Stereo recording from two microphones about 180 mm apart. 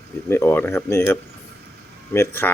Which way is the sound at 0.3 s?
15° left (ahead or behind).